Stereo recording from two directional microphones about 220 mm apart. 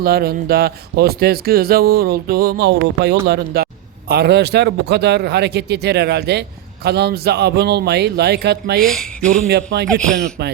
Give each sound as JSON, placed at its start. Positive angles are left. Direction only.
{"t": 0.0, "sound": "speech", "side_deg": -45}
{"t": 8.8, "sound": "speech", "side_deg": 0}
{"t": 9.5, "sound": "speech", "side_deg": -50}